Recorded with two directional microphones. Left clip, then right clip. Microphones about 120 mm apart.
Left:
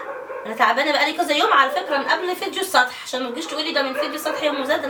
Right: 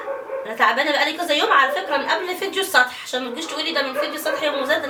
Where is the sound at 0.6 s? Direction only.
5° left (ahead or behind).